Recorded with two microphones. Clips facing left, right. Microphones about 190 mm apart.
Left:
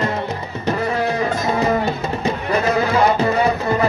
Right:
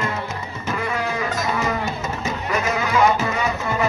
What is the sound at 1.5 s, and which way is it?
Music, 40° left (ahead or behind).